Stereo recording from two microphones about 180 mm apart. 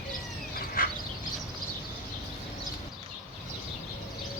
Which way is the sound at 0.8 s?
50° left (ahead or behind).